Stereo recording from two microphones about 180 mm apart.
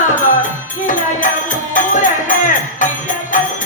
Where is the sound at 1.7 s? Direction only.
45° left (ahead or behind).